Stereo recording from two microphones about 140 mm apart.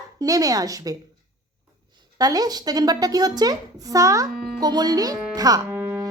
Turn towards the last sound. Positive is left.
turn(degrees=-15)  # may be behind; listen again after turning